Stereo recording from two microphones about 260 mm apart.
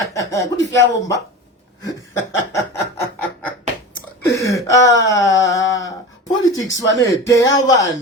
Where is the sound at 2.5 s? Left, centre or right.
Centre.